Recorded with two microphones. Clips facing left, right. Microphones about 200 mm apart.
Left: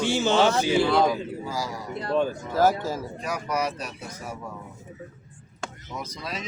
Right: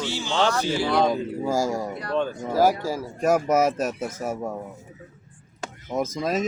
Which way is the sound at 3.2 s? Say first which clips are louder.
Right 11 dB; 45° right (ahead or behind).